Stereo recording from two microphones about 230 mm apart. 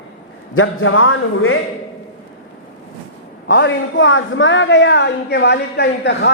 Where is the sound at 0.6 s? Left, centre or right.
Left.